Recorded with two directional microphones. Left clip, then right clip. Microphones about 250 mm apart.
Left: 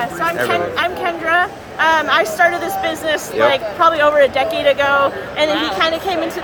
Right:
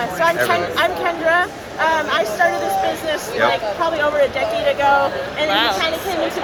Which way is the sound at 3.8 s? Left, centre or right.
Centre.